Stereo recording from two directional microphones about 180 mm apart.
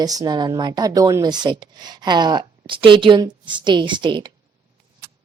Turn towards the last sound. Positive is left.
turn(degrees=-25)  # may be behind; listen again after turning